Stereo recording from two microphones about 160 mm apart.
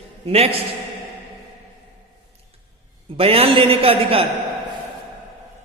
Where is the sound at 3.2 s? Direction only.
35° right (ahead or behind).